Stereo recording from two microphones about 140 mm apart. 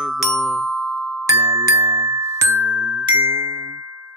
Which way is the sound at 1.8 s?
50° right (ahead or behind).